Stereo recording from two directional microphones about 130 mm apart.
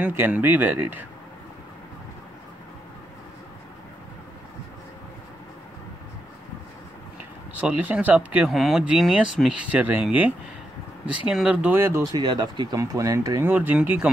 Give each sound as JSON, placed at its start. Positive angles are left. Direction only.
{"t": 0.0, "sound": "speech", "side_deg": -15}
{"t": 7.6, "sound": "speech", "side_deg": -10}
{"t": 12.1, "sound": "speech", "side_deg": -35}
{"t": 13.5, "sound": "speech", "side_deg": -15}